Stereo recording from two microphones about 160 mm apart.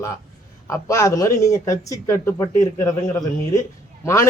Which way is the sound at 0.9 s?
20° left (ahead or behind).